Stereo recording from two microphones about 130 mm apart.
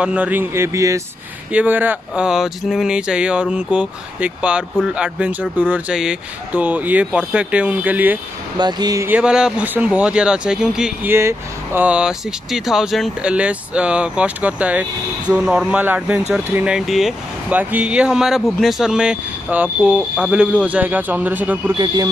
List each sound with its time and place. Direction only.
0.0 s speech: 10° right (ahead or behind)
1.5 s speech: 10° right (ahead or behind)
8.5 s speech: 35° right (ahead or behind)
9.0 s speech: 10° right (ahead or behind)
11.1 s speech: 20° right (ahead or behind); by 17.1 s centre (ahead or behind)
17.5 s speech: 10° right (ahead or behind)
21.7 s speech: 30° right (ahead or behind)